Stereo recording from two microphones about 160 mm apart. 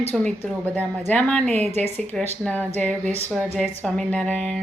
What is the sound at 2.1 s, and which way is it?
A woman's voice, 5° left (ahead or behind).